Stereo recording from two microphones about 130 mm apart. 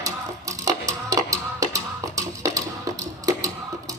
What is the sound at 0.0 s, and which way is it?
Music, 25° right (ahead or behind).